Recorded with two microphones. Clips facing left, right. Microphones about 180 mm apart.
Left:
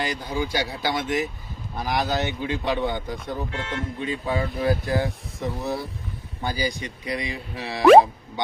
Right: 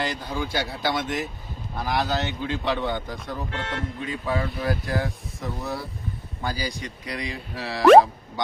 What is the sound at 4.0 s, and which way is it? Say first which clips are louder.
Speech: left 2 dB; 25° left (ahead or behind).